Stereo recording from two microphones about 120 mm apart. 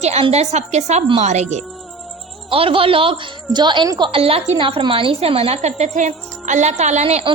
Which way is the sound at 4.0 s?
50° right (ahead or behind).